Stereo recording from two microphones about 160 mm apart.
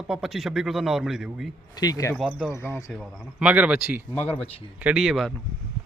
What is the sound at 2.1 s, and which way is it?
Speech, 5° right (ahead or behind).